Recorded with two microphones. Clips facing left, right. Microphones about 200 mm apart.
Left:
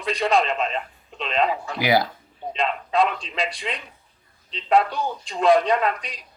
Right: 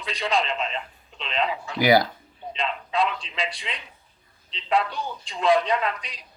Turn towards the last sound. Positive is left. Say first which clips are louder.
# left 3 dB
turn(degrees=45)  # may be behind; listen again after turning